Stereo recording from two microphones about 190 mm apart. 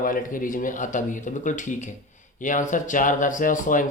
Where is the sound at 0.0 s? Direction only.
45° left (ahead or behind).